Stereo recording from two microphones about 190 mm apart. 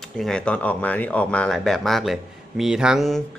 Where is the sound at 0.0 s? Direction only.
Centre (ahead or behind).